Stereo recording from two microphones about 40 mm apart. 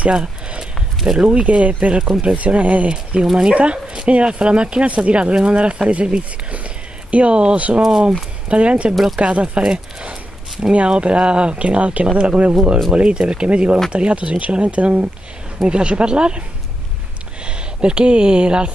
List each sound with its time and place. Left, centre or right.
0.1 s a sound: right
1.0 s speech: right
17.5 s speech: right